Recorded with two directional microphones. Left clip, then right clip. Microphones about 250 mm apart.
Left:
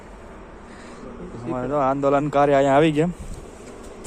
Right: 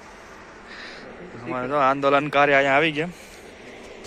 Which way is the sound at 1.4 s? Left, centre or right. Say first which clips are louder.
Right 1 dB; centre.